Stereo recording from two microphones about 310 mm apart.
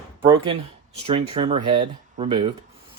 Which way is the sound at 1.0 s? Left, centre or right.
Centre.